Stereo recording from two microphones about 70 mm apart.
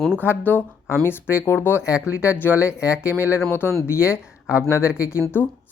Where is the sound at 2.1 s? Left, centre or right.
Centre.